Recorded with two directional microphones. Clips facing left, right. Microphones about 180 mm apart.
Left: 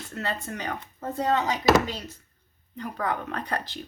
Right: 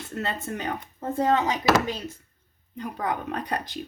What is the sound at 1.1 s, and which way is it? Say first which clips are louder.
Speech: right 2 dB; 20° right (ahead or behind).